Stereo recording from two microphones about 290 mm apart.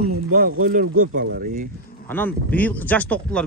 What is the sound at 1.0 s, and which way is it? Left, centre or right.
Speech, right.